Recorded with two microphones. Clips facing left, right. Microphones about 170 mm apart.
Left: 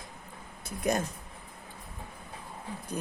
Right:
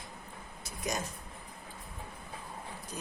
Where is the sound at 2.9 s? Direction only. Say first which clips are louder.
Left 8 dB; 55° left (ahead or behind).